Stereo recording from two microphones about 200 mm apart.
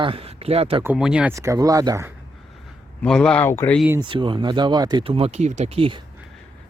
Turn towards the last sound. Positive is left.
turn(degrees=-30)  # may be behind; listen again after turning